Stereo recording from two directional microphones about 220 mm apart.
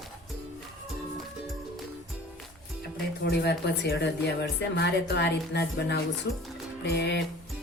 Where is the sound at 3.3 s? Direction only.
50° left (ahead or behind).